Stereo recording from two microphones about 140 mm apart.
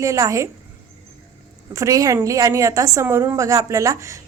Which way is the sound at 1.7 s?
25° right (ahead or behind).